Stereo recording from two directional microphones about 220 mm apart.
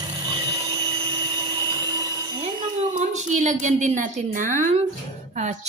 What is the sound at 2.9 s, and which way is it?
A woman's voice, 35° right (ahead or behind).